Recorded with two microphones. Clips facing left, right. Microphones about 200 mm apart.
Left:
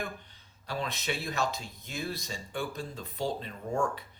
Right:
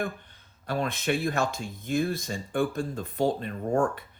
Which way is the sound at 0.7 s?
50° right (ahead or behind).